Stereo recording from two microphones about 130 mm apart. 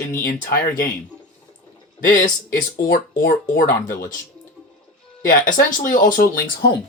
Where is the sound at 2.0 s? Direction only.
90° left.